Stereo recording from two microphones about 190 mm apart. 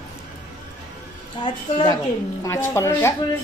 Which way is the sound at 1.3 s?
20° left (ahead or behind).